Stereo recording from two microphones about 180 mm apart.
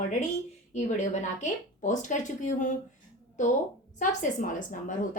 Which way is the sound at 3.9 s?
45° left (ahead or behind).